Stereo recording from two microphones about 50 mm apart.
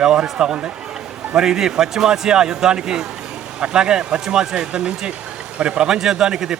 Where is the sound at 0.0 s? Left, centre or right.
Centre.